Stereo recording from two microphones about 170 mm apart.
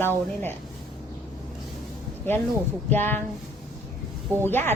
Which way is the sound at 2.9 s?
10° left (ahead or behind).